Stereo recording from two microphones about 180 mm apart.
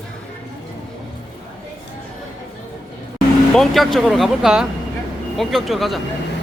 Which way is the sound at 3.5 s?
Centre (ahead or behind).